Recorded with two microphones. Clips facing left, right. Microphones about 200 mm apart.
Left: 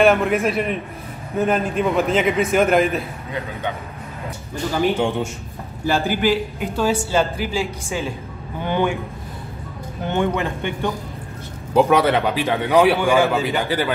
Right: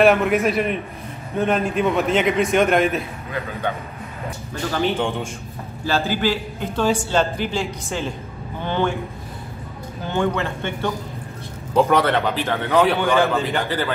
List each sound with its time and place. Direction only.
0.0 s a man's voice: centre (ahead or behind)
5.9 s a man's voice: 15° left (ahead or behind)
10.0 s a man's voice: 15° left (ahead or behind)